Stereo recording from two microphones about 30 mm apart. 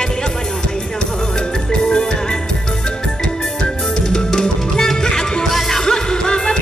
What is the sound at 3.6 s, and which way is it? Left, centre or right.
Music, left.